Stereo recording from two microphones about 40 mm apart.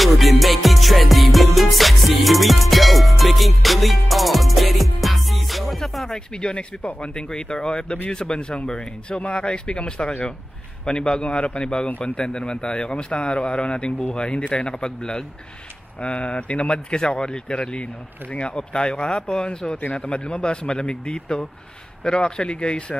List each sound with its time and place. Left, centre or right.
0.0 s music: centre
6.1 s speech: left
16.0 s speech: left